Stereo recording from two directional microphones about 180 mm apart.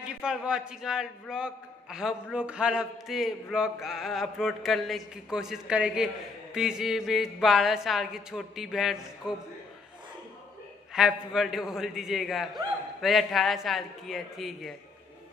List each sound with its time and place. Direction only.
0.0 s a man's voice: 5° right (ahead or behind)
10.9 s a man's voice: 5° right (ahead or behind)